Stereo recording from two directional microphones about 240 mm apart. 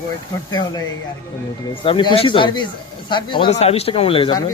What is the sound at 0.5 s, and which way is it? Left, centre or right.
Speech, centre.